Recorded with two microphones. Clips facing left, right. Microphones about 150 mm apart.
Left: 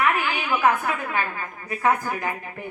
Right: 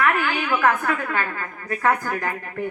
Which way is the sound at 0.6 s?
15° left (ahead or behind).